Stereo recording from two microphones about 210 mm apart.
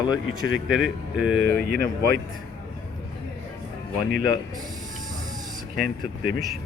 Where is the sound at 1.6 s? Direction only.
50° right (ahead or behind).